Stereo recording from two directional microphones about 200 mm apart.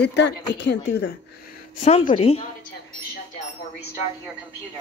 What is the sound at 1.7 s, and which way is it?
Speech, 35° left (ahead or behind).